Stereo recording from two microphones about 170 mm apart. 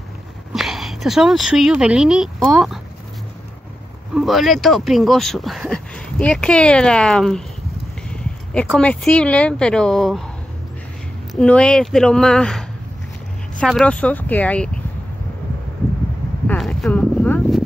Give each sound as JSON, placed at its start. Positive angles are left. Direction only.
{"t": 0.5, "sound": "speech", "side_deg": 0}
{"t": 4.1, "sound": "speech", "side_deg": 0}
{"t": 8.1, "sound": "a sound", "side_deg": 5}
{"t": 8.7, "sound": "speech", "side_deg": 5}
{"t": 11.3, "sound": "speech", "side_deg": 5}
{"t": 16.4, "sound": "a sound", "side_deg": 0}